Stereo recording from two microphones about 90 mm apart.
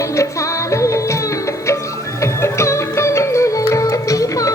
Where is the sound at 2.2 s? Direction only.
30° left (ahead or behind).